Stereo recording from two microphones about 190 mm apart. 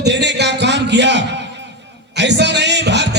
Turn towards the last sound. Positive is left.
turn(degrees=-65)  # may be behind; listen again after turning